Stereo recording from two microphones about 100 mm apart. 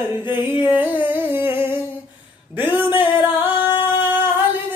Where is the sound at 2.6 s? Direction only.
20° right (ahead or behind).